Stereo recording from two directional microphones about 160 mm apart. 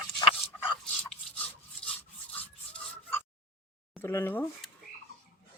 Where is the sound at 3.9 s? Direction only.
15° left (ahead or behind).